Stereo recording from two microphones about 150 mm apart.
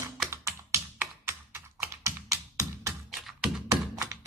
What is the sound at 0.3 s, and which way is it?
Computer keyboard, 20° right (ahead or behind).